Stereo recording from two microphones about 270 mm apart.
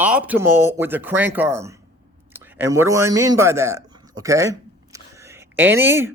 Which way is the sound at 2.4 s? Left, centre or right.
Centre.